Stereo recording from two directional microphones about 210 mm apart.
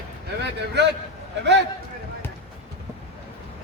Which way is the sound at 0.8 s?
55° right (ahead or behind).